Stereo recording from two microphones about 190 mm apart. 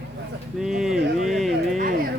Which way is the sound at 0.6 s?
Centre (ahead or behind).